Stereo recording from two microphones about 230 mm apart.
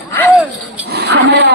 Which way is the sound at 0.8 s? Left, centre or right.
Right.